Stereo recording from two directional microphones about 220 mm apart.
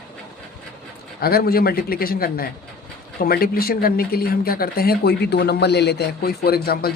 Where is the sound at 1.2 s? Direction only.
45° left (ahead or behind).